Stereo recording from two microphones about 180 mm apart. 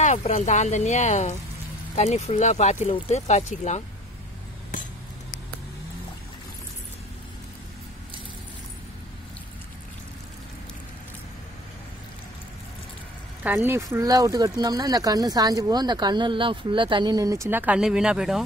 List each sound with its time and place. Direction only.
0.2 s speech: 40° left (ahead or behind)
13.4 s speech: 10° right (ahead or behind)